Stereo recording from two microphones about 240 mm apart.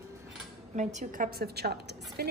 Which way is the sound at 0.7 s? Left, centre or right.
Right.